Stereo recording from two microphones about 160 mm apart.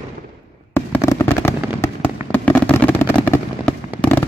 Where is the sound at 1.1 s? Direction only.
15° left (ahead or behind).